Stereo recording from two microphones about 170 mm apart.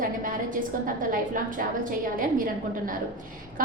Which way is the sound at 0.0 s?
55° right (ahead or behind).